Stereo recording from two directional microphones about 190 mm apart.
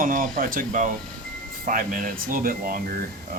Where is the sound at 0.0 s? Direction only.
45° right (ahead or behind).